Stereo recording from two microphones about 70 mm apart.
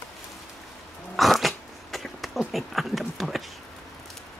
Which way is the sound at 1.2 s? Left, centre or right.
Centre.